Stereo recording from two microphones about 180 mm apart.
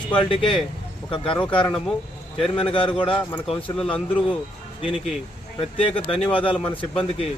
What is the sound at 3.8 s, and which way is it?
Speech, 5° left (ahead or behind).